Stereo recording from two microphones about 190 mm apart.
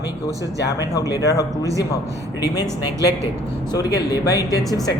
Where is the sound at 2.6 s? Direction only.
15° right (ahead or behind).